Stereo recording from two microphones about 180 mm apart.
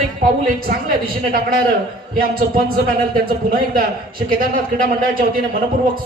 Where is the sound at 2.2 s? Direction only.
55° right (ahead or behind).